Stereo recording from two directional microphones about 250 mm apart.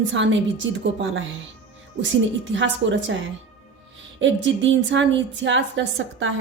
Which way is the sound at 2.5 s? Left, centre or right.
Right.